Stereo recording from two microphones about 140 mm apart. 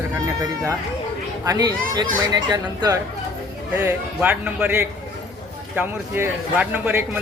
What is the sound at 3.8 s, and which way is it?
A man's voice, 15° right (ahead or behind).